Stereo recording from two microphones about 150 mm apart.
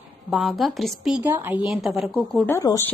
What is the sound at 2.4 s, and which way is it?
Speech, 20° left (ahead or behind).